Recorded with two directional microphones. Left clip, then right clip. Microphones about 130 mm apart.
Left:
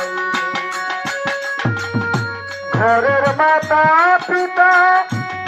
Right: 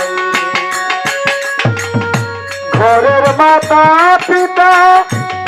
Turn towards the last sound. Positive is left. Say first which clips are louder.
# right 5 dB
turn(degrees=-35)  # may be behind; listen again after turning